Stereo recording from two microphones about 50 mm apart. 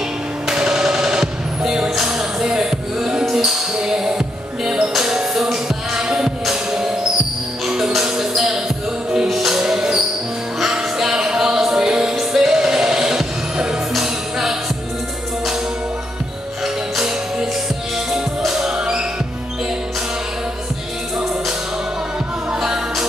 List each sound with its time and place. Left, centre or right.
0.5 s music: centre
16.6 s music: centre
18.8 s music: centre
22.5 s music: centre